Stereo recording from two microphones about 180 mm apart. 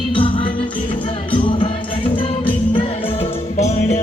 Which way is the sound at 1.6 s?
30° left (ahead or behind).